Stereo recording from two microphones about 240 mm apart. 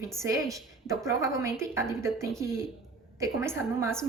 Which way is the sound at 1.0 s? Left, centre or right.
Centre.